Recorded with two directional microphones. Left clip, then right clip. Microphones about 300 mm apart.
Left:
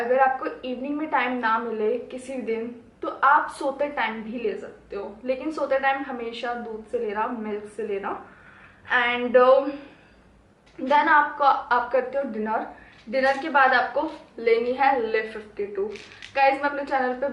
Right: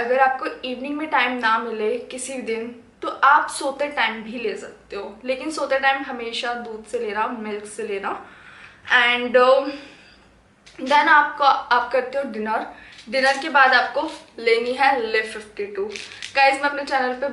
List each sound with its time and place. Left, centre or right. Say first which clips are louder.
0.0 s a woman's voice: right 2 dB; centre